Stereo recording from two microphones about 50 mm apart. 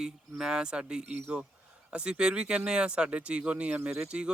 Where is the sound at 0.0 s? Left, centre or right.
Centre.